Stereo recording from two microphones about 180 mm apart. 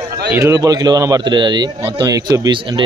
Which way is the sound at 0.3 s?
20° right (ahead or behind).